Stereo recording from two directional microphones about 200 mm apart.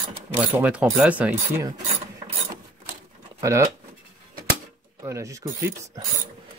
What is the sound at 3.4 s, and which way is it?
Speech, 15° right (ahead or behind).